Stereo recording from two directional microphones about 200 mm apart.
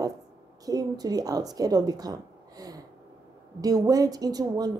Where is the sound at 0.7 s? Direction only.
20° right (ahead or behind).